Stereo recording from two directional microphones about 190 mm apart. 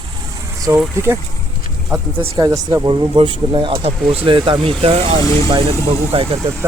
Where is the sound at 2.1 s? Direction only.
25° right (ahead or behind).